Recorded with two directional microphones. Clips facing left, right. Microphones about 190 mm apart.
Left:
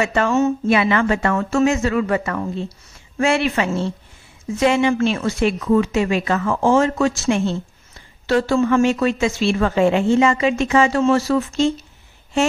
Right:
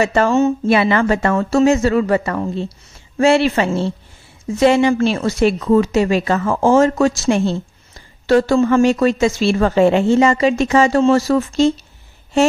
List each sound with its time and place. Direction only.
0.0 s speech: 35° right (ahead or behind)